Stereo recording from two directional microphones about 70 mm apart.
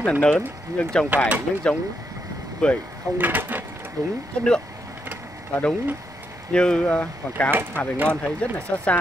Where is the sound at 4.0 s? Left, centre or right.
Right.